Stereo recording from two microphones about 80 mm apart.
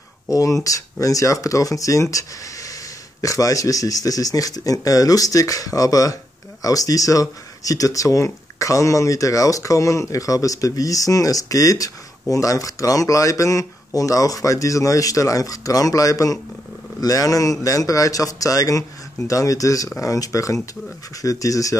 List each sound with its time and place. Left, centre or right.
0.3 s speech: left